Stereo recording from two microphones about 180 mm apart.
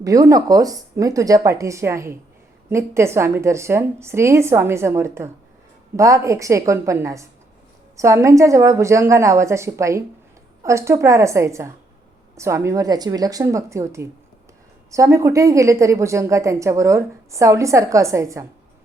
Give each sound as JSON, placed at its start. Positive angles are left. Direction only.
{"t": 0.0, "sound": "a woman's voice", "side_deg": -20}